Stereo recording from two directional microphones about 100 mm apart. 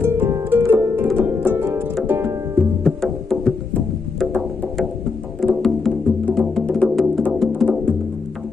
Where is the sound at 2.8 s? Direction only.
5° left (ahead or behind).